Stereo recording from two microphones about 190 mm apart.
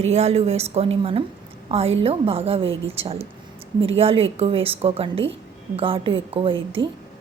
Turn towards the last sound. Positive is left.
turn(degrees=-25)  # may be behind; listen again after turning